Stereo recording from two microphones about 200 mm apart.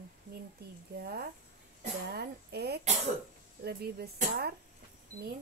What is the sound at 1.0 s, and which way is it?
Speech, 50° right (ahead or behind).